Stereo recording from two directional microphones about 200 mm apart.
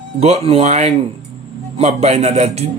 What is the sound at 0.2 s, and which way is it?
Speech, 30° right (ahead or behind).